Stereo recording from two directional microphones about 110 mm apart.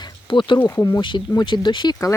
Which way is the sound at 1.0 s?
45° left (ahead or behind).